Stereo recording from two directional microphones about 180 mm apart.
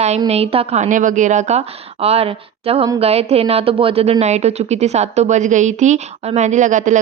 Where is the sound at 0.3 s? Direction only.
35° right (ahead or behind).